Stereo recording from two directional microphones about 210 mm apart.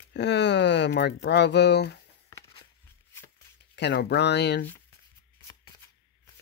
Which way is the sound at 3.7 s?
55° left (ahead or behind).